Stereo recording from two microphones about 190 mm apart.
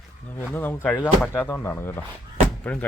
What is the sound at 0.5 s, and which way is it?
Speech, 10° left (ahead or behind).